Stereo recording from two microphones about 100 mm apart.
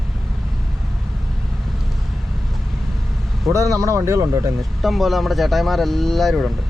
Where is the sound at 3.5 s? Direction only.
35° right (ahead or behind).